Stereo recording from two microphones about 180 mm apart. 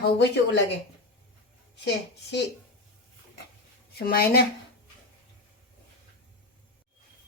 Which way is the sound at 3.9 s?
60° left (ahead or behind).